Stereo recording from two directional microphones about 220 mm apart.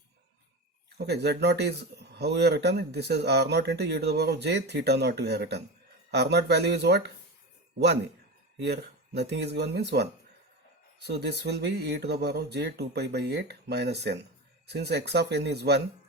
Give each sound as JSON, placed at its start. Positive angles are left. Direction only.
{"t": 0.9, "sound": "a man's voice", "side_deg": -50}
{"t": 8.5, "sound": "a man's voice", "side_deg": -50}